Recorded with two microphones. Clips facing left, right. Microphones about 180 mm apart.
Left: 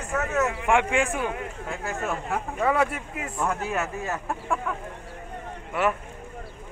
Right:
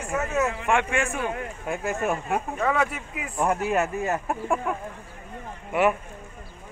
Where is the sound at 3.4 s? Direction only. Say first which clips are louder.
Right 5 dB; 15° right (ahead or behind).